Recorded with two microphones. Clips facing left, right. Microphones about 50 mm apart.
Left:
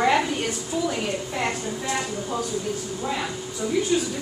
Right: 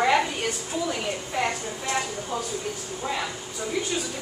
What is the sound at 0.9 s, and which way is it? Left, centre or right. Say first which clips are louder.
Speech: left 2 dB; centre.